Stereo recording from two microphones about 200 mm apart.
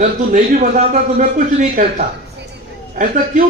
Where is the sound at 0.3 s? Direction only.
40° right (ahead or behind).